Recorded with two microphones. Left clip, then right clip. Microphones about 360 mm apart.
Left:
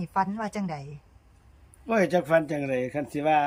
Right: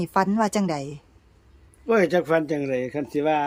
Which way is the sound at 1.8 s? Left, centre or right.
Centre.